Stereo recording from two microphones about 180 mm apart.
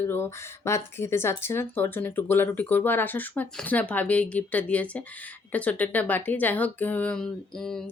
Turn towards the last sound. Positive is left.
turn(degrees=5)  # may be behind; listen again after turning